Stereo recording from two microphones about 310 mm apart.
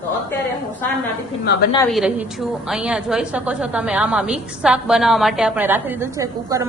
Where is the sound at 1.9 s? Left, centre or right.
Centre.